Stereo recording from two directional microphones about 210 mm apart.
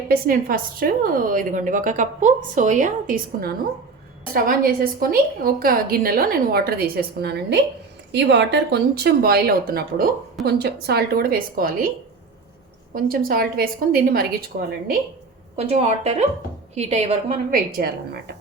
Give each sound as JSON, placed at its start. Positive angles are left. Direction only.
{"t": 0.1, "sound": "a woman's voice", "side_deg": -45}
{"t": 12.9, "sound": "a woman's voice", "side_deg": -45}
{"t": 15.5, "sound": "a woman's voice", "side_deg": -30}